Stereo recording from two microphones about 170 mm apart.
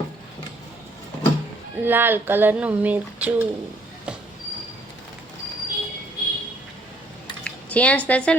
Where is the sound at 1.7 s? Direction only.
10° right (ahead or behind).